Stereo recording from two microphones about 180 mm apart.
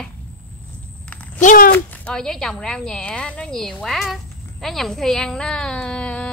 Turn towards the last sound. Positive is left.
turn(degrees=5)  # may be behind; listen again after turning